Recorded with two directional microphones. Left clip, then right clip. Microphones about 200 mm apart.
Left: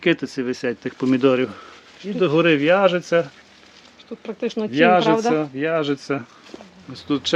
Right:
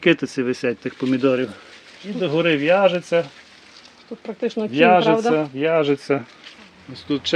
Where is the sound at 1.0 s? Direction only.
10° left (ahead or behind).